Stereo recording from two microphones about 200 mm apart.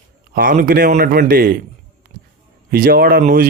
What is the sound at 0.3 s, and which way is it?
Speech, 45° right (ahead or behind).